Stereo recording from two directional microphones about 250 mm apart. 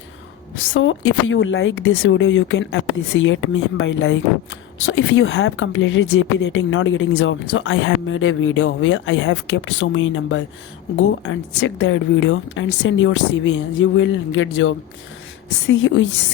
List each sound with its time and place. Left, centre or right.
0.5 s speech: left